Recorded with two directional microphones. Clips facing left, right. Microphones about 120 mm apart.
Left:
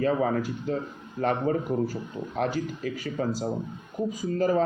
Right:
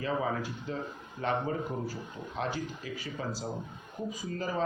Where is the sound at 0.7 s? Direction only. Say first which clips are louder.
Left 7 dB; 45° left (ahead or behind).